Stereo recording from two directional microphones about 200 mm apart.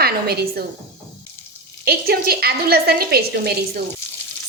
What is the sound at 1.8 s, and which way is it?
A woman's voice, 50° right (ahead or behind).